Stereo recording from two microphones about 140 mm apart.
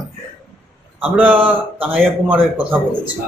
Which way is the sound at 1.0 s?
10° right (ahead or behind).